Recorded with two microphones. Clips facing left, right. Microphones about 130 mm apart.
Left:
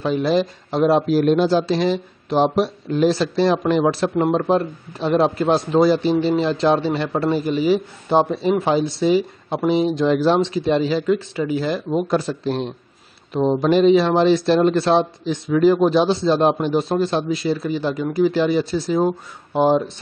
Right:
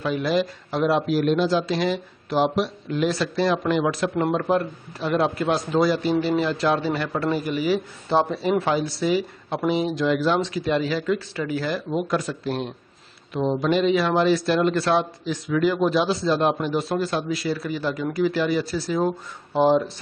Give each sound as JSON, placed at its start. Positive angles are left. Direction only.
{"t": 0.0, "sound": "a man's voice", "side_deg": 30}
{"t": 2.5, "sound": "a man's voice", "side_deg": 35}